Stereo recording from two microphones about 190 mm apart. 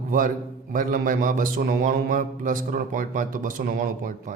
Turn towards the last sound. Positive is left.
turn(degrees=-45)  # may be behind; listen again after turning